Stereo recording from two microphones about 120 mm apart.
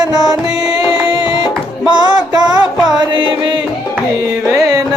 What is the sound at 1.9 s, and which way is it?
Music, 35° right (ahead or behind).